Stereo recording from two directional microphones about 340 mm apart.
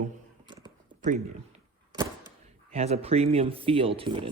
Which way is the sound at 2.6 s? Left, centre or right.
Centre.